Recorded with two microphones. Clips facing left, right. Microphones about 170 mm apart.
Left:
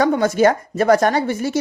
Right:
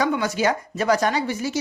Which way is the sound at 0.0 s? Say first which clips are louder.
Left 7 dB; 50° left (ahead or behind).